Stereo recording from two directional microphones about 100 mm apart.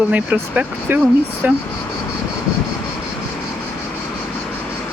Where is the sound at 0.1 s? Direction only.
15° right (ahead or behind).